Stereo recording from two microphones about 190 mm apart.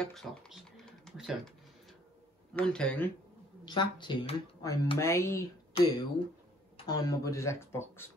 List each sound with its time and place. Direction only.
0.0 s typing: 5° left (ahead or behind)
2.5 s speech: 5° left (ahead or behind)
3.6 s speech: 25° left (ahead or behind)
5.8 s speech: 30° left (ahead or behind); by 8.1 s 15° left (ahead or behind)